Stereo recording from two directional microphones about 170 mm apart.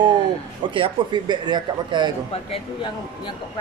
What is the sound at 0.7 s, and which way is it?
Speech, 25° right (ahead or behind).